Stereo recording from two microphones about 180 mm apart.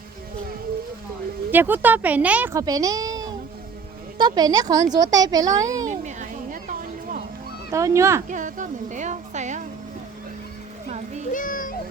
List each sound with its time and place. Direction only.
1.5 s speech: 10° right (ahead or behind)
5.8 s music: 40° right (ahead or behind)
7.7 s speech: 15° right (ahead or behind)
8.3 s speech: 45° right (ahead or behind)
10.8 s music: 40° right (ahead or behind)
11.3 s music: 50° left (ahead or behind)